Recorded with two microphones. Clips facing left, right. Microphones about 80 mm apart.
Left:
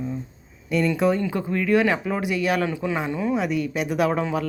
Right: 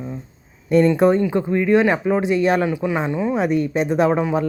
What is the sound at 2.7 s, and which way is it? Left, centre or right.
Speech, centre.